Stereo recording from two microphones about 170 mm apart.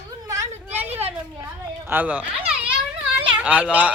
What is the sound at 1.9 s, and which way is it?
A child's voice, 10° right (ahead or behind).